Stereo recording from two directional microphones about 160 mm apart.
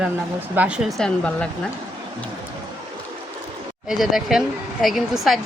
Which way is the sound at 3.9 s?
Centre (ahead or behind).